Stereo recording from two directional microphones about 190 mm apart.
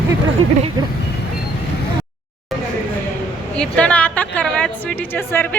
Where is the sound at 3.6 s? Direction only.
5° left (ahead or behind).